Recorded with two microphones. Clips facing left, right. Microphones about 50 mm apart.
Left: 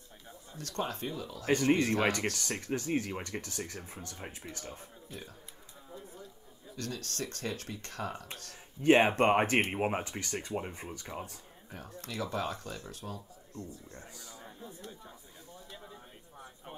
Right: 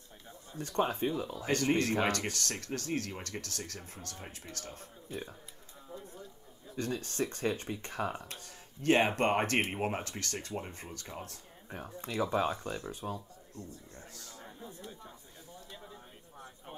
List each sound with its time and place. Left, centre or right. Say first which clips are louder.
0.6 s speech: right 5 dB; right
1.5 s speech: left 3 dB; centre
5.1 s speech: right 5 dB; centre
5.9 s a sound: right 1 dB; centre
6.7 s speech: right 4 dB; right
8.8 s speech: left 3 dB; centre
11.7 s speech: right 4 dB; centre
13.9 s a man's voice: left 1 dB; centre
14.4 s a sound: right 1 dB; centre